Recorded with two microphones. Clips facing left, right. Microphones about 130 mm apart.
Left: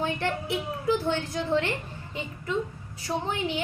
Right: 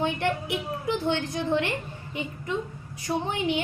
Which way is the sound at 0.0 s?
15° right (ahead or behind).